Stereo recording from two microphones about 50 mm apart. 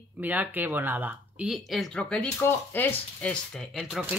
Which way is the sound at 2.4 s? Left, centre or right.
Left.